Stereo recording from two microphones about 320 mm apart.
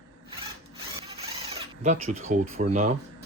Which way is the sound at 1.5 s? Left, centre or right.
Right.